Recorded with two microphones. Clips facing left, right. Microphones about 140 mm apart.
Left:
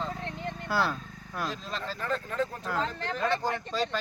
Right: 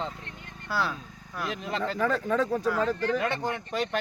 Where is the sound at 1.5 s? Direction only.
65° right (ahead or behind); by 2.5 s 90° right.